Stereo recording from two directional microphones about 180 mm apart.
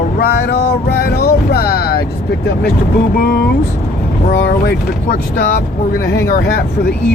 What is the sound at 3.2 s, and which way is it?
Speech, 60° left (ahead or behind).